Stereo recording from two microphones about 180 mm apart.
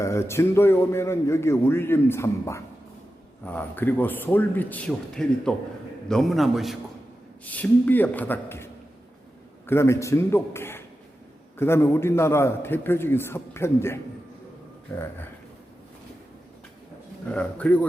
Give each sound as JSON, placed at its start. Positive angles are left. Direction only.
{"t": 0.0, "sound": "a man's voice", "side_deg": 15}
{"t": 17.3, "sound": "a man's voice", "side_deg": 5}